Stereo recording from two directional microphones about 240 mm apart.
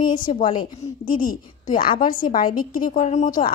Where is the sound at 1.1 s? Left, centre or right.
Left.